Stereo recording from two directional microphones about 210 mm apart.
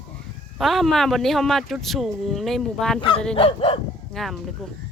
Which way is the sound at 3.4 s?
25° left (ahead or behind).